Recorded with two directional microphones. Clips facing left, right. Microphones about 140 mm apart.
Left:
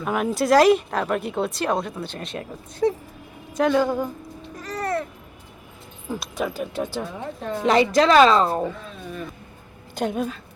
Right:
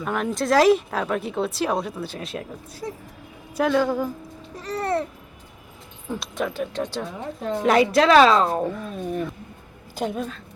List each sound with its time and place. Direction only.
0.0 s speech: 5° left (ahead or behind)
2.8 s speech: 80° left
3.5 s speech: centre (ahead or behind)
4.6 s babbling: 30° right (ahead or behind)
6.1 s speech: centre (ahead or behind)
8.6 s speech: 50° right (ahead or behind)
9.9 s speech: centre (ahead or behind)